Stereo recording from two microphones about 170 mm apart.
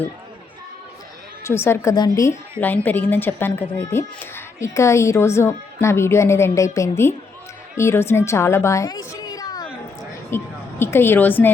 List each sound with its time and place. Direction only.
1.5 s a woman's voice: 15° left (ahead or behind)